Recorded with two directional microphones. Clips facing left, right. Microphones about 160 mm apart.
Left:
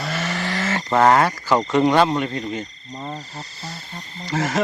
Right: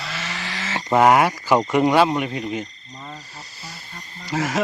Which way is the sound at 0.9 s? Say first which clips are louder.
Right 1 dB; 10° right (ahead or behind).